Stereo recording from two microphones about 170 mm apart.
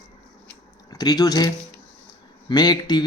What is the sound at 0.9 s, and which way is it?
Speech, 25° left (ahead or behind).